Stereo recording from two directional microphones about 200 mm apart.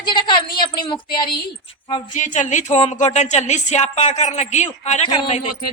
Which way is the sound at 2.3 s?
35° left (ahead or behind).